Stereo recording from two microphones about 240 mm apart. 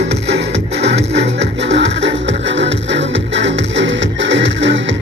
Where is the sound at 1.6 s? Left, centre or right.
Right.